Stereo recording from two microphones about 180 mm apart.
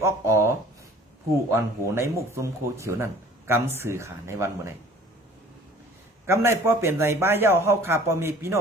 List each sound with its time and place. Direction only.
0.0 s speech: 15° right (ahead or behind)
6.2 s speech: 15° right (ahead or behind)